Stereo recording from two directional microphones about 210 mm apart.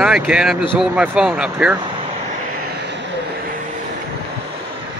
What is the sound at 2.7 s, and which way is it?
Vehicle, 55° right (ahead or behind).